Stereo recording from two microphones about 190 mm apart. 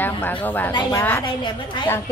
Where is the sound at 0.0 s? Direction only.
10° left (ahead or behind).